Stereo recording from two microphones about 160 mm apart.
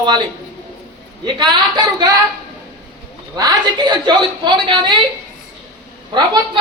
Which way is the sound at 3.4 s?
25° right (ahead or behind).